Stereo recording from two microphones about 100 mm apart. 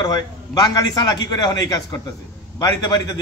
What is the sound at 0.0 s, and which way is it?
A man's voice, 40° left (ahead or behind).